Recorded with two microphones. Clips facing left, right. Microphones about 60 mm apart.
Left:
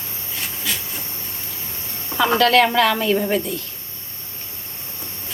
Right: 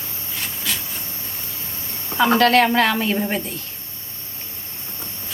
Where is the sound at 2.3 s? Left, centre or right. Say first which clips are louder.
Even; right.